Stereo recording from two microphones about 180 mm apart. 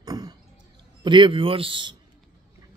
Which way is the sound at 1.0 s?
25° right (ahead or behind).